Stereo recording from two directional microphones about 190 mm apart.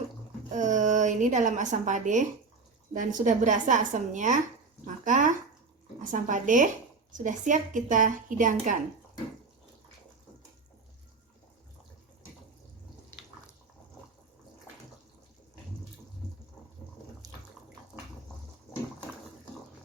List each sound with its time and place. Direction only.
0.5 s a woman's voice: 40° right (ahead or behind)
17.2 s bathtub: 20° right (ahead or behind)